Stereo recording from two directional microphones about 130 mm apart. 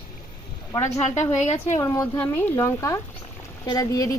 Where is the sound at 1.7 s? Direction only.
25° left (ahead or behind).